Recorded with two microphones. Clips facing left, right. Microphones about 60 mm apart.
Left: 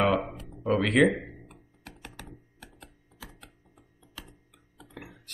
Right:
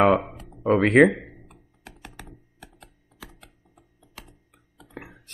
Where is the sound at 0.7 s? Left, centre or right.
Right.